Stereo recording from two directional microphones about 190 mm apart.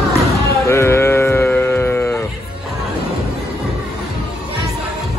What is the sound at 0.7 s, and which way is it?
Sheep, 15° left (ahead or behind).